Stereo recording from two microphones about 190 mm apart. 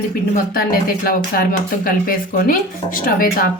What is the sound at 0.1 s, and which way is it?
Speech, 50° left (ahead or behind).